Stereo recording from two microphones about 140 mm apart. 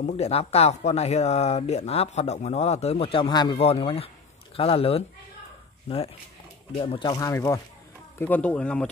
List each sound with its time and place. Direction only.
0.0 s speech: 50° left (ahead or behind)
6.8 s speech: 45° left (ahead or behind)
7.1 s speech: 25° left (ahead or behind)
8.2 s speech: 10° left (ahead or behind)